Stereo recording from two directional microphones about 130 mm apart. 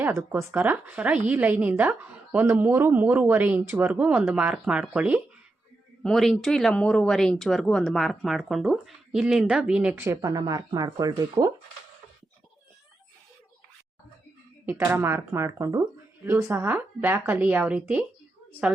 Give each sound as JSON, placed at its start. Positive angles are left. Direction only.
{"t": 0.0, "sound": "a woman's voice", "side_deg": -20}
{"t": 6.0, "sound": "speech", "side_deg": 5}
{"t": 10.1, "sound": "speech", "side_deg": -25}
{"t": 14.7, "sound": "a woman's voice", "side_deg": -20}